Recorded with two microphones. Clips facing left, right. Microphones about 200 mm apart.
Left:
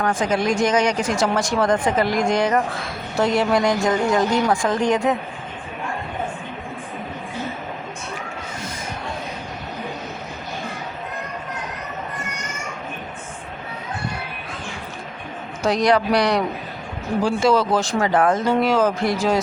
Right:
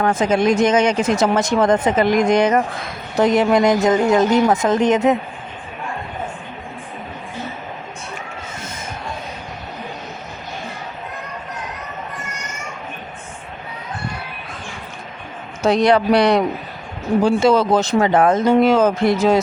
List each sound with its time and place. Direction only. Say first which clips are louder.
0.0 s speech: right 4 dB; 25° right (ahead or behind)
15.6 s speech: right 4 dB; 25° right (ahead or behind)